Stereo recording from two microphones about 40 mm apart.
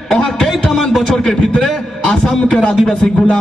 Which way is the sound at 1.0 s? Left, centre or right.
Centre.